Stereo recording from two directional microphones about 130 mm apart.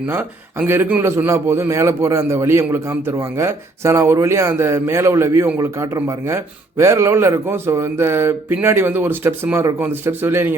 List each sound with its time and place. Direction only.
0.1 s a man's voice: 20° right (ahead or behind)